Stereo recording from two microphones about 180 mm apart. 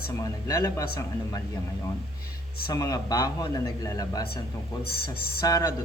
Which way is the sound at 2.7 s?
20° left (ahead or behind).